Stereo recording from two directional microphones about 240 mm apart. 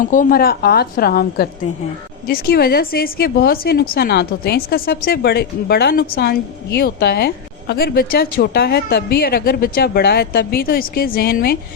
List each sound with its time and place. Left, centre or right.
0.0 s speech: left